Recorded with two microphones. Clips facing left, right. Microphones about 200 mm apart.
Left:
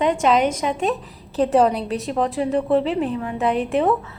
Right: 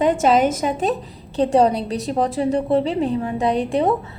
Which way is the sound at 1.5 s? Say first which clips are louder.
Right 1 dB; 30° right (ahead or behind).